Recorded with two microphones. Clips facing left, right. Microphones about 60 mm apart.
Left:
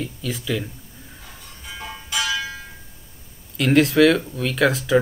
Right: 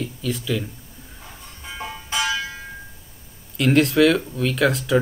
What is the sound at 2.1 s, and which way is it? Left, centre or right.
Music, right.